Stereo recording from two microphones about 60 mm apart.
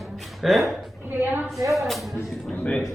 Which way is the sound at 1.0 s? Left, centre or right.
Right.